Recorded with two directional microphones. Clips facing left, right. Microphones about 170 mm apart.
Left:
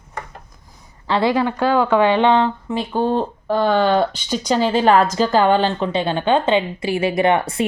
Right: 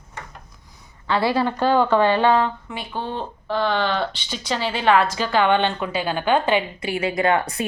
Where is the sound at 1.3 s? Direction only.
15° left (ahead or behind).